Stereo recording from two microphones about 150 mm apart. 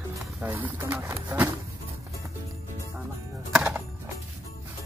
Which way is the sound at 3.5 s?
10° right (ahead or behind).